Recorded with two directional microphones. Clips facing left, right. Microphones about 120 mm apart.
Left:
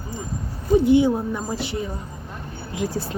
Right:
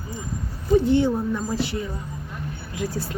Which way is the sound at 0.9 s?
10° left (ahead or behind).